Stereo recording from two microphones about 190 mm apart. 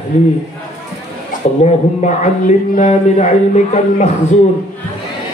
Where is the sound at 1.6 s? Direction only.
40° left (ahead or behind).